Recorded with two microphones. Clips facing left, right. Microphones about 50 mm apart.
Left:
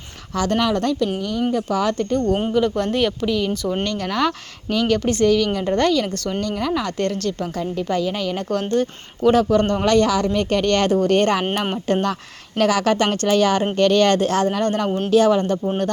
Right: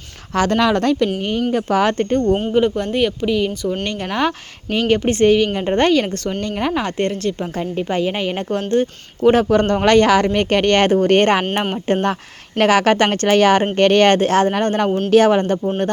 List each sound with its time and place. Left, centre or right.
0.3 s speech: right
2.5 s speech: right
2.7 s speech: centre
3.8 s a woman's voice: right
9.3 s speech: right
11.9 s a woman's voice: right
12.5 s a woman's voice: right
14.8 s a man's voice: centre
15.1 s speech: right